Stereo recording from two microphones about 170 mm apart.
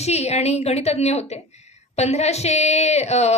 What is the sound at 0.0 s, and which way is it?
A woman's voice, 40° left (ahead or behind).